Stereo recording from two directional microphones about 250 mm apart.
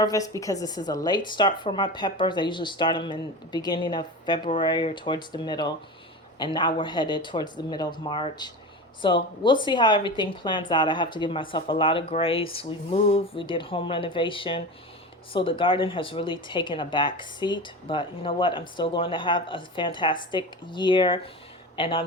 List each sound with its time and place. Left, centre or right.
0.0 s a woman's voice: centre